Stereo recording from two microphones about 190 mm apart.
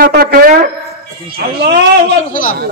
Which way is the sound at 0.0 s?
50° right (ahead or behind).